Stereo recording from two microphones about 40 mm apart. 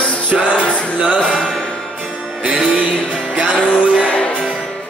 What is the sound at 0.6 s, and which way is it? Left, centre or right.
Music, left.